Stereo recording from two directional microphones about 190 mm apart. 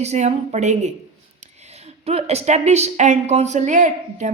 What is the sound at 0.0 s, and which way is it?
Speech, 35° right (ahead or behind).